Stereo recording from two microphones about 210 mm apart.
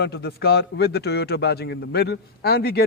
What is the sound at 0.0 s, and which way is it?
A man's voice, 50° left (ahead or behind).